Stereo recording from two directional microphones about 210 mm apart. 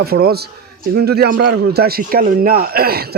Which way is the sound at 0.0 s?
50° right (ahead or behind).